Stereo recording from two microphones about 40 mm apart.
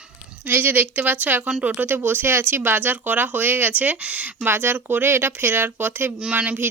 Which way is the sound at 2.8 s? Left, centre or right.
Right.